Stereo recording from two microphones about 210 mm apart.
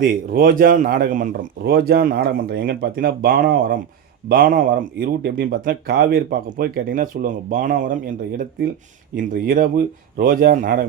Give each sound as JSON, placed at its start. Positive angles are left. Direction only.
{"t": 0.0, "sound": "speech", "side_deg": -45}